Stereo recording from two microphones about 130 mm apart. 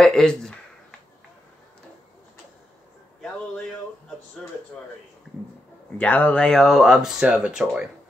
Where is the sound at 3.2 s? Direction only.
5° left (ahead or behind).